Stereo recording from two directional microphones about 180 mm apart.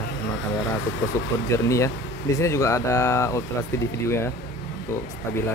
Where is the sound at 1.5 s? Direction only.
15° left (ahead or behind).